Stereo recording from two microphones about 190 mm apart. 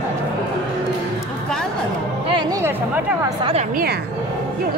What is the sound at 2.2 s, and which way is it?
Music, 25° right (ahead or behind).